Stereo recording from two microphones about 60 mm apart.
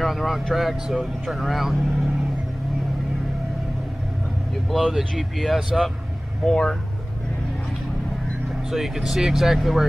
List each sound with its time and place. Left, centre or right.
0.0 s speech: centre
4.6 s speech: centre
8.7 s speech: centre